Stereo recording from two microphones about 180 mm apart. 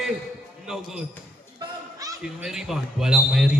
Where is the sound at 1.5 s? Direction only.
20° right (ahead or behind).